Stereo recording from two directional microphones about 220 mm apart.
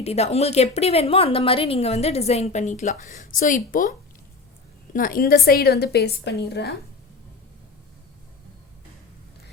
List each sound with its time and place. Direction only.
0.0 s a woman's voice: 30° left (ahead or behind)
4.9 s a woman's voice: 40° left (ahead or behind)